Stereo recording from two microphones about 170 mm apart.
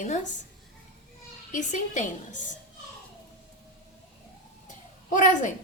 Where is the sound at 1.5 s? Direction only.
45° left (ahead or behind).